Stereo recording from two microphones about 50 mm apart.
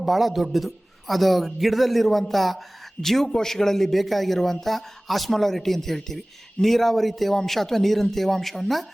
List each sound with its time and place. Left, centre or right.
0.0 s speech: centre